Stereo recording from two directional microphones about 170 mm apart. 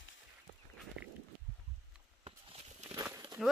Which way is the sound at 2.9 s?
15° right (ahead or behind).